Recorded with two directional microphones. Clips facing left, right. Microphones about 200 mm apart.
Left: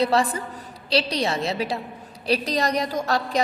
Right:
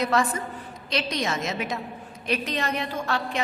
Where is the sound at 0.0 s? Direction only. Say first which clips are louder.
Left 3 dB; 35° left (ahead or behind).